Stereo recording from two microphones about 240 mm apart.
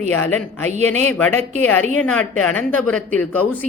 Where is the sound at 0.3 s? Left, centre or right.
Centre.